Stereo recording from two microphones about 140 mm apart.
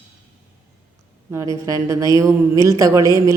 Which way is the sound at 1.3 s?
20° right (ahead or behind).